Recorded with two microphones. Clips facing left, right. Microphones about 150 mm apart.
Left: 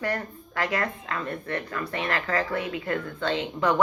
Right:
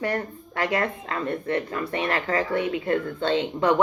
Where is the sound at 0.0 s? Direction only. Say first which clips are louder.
Right 3 dB; 25° right (ahead or behind).